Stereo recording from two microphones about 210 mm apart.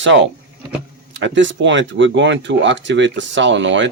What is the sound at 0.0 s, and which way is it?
Speech, 60° right (ahead or behind).